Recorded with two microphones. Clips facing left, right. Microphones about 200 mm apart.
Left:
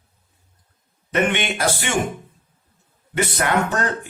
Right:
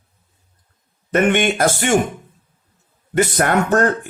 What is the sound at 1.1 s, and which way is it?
Speech, 50° right (ahead or behind).